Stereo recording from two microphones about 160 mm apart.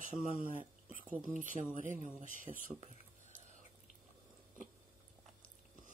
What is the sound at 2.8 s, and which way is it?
Whispering, 50° right (ahead or behind).